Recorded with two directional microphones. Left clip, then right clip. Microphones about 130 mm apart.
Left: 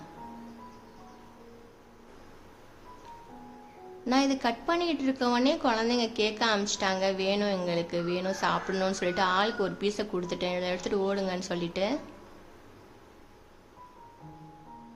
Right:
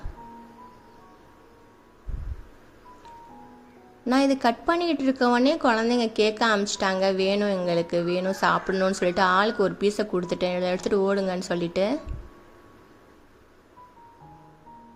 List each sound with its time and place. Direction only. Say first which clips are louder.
4.1 s a woman's voice: right 5 dB; 45° right (ahead or behind)